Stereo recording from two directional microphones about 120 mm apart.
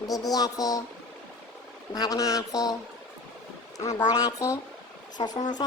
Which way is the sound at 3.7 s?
25° left (ahead or behind).